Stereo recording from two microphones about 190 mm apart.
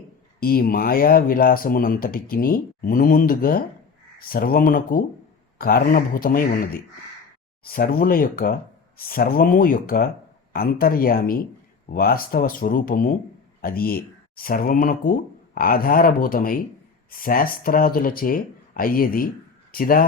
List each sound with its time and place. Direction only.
0.3 s speech: 50° left (ahead or behind)